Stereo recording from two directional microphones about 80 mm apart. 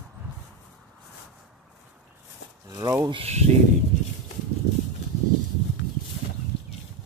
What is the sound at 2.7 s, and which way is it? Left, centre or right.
Speech, right.